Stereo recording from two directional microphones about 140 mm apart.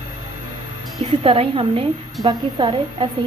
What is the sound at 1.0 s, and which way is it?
A woman's voice, 45° right (ahead or behind).